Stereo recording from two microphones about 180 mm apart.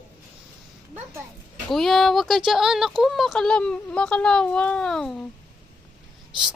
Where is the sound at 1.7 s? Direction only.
Centre (ahead or behind).